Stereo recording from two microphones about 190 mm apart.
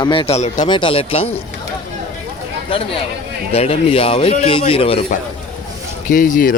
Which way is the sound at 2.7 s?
30° left (ahead or behind).